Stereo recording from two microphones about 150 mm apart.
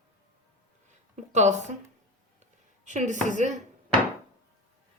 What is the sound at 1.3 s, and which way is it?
Speech, 50° right (ahead or behind).